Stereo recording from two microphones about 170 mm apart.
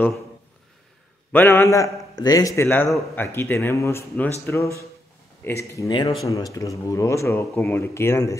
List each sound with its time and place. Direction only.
1.3 s speech: 10° left (ahead or behind)